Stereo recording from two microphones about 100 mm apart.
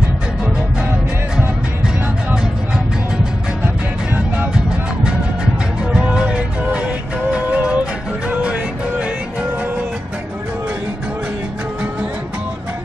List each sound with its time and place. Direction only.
3.6 s music: 20° right (ahead or behind)
5.9 s music: 10° right (ahead or behind)